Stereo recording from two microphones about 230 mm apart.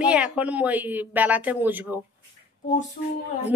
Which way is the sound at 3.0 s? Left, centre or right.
Left.